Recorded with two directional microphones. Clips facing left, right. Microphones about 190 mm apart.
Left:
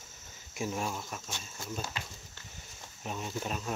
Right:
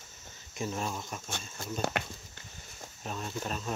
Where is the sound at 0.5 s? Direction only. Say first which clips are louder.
Even; 10° left (ahead or behind).